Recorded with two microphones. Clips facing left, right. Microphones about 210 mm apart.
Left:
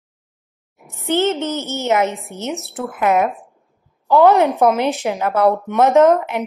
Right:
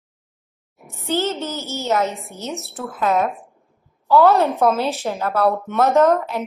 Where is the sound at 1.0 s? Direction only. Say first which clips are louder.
Left 4 dB; 20° left (ahead or behind).